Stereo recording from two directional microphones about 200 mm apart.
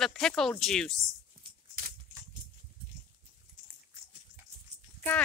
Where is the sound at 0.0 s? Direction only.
Centre (ahead or behind).